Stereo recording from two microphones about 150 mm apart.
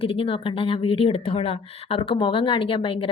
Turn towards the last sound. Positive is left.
turn(degrees=35)  # may be behind; listen again after turning